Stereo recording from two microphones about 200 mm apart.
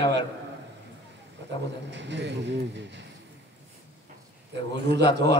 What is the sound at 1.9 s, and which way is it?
Speech, 60° right (ahead or behind).